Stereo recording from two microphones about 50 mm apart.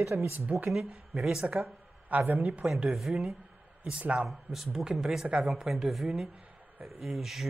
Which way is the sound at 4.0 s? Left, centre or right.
Right.